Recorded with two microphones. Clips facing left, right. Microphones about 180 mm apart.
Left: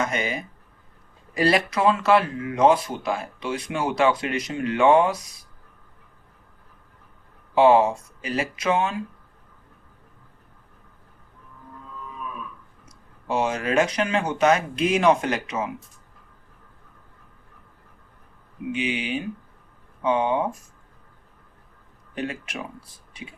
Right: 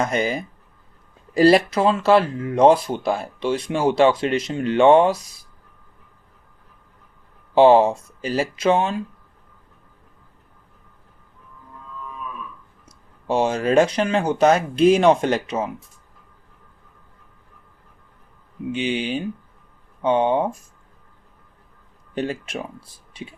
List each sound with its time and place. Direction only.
0.0 s speech: 35° right (ahead or behind)
7.5 s speech: 30° right (ahead or behind)
13.2 s speech: 30° right (ahead or behind)
18.7 s speech: 30° right (ahead or behind)
22.1 s speech: 30° right (ahead or behind)